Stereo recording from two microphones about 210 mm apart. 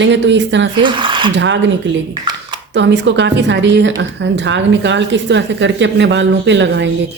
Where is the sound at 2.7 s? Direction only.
55° right (ahead or behind).